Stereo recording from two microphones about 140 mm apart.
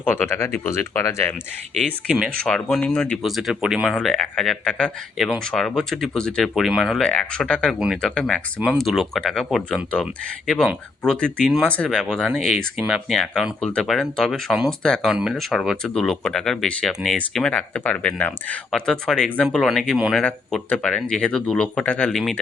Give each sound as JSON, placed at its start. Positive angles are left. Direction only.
{"t": 0.0, "sound": "speech", "side_deg": 10}
{"t": 2.0, "sound": "speech", "side_deg": -5}
{"t": 2.4, "sound": "speech", "side_deg": 5}
{"t": 8.6, "sound": "speech", "side_deg": -5}
{"t": 20.2, "sound": "speech", "side_deg": 10}